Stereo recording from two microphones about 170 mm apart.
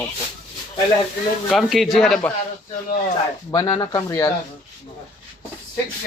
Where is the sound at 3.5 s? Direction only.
20° left (ahead or behind).